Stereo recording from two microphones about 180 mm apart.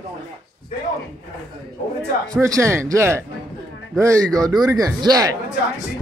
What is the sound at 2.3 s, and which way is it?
Speech, 15° right (ahead or behind).